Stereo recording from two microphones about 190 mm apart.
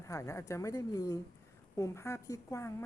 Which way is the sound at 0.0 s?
15° left (ahead or behind).